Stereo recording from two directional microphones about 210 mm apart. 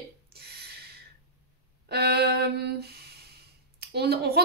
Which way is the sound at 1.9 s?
50° right (ahead or behind).